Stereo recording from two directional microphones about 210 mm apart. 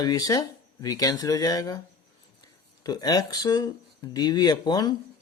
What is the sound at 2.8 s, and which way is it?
Speech, 20° left (ahead or behind).